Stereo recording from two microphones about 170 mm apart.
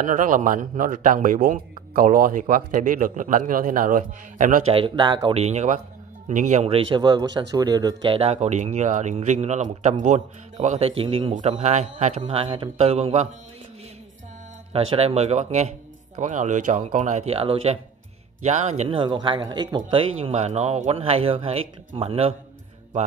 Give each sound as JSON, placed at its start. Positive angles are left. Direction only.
{"t": 0.0, "sound": "speech", "side_deg": -50}
{"t": 4.6, "sound": "speech", "side_deg": -30}
{"t": 11.3, "sound": "speech", "side_deg": -45}
{"t": 14.7, "sound": "speech", "side_deg": -35}
{"t": 19.9, "sound": "speech", "side_deg": -35}